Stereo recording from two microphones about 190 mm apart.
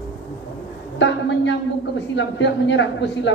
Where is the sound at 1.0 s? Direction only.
70° left (ahead or behind).